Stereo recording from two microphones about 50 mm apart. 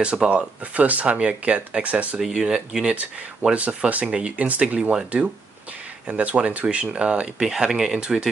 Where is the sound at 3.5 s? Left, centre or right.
Right.